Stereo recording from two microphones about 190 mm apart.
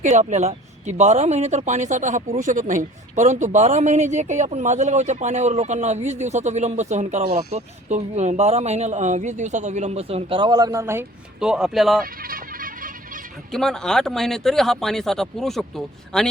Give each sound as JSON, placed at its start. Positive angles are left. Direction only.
{"t": 0.0, "sound": "speech", "side_deg": -40}
{"t": 11.3, "sound": "speech", "side_deg": -5}
{"t": 12.0, "sound": "music", "side_deg": -50}
{"t": 13.5, "sound": "speech", "side_deg": 5}